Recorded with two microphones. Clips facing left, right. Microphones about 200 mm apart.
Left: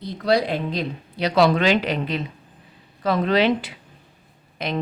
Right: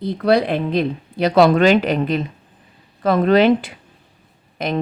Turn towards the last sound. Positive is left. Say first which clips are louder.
# right 5 dB
turn(degrees=-50)  # may be behind; listen again after turning